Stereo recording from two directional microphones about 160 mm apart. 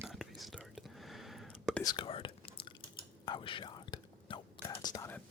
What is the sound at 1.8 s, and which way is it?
Whispering, 30° left (ahead or behind).